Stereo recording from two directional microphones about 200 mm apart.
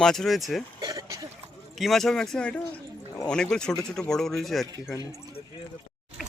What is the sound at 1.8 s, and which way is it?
Speech, centre (ahead or behind).